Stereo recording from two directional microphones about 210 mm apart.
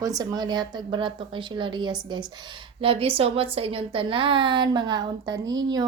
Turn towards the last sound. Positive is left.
turn(degrees=-20)  # may be behind; listen again after turning